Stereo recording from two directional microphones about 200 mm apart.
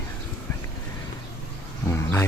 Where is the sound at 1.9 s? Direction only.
10° left (ahead or behind).